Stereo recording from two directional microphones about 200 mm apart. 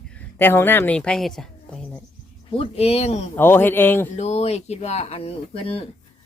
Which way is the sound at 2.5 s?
30° left (ahead or behind).